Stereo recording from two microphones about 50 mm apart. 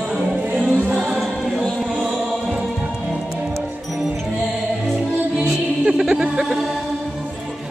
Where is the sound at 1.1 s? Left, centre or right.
Centre.